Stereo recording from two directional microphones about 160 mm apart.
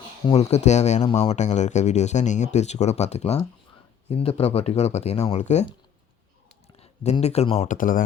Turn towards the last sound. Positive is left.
turn(degrees=55)  # may be behind; listen again after turning